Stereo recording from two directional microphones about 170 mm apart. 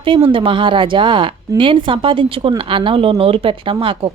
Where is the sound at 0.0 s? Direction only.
30° right (ahead or behind).